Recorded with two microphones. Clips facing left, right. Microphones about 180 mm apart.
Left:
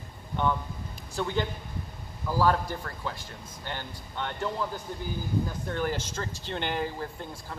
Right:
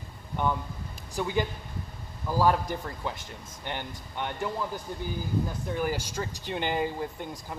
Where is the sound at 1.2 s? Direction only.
10° right (ahead or behind).